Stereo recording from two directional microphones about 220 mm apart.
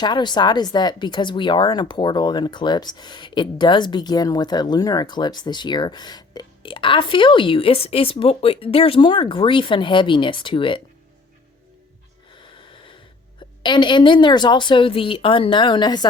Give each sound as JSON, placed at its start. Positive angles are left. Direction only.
{"t": 0.0, "sound": "speech", "side_deg": 20}
{"t": 13.6, "sound": "speech", "side_deg": 20}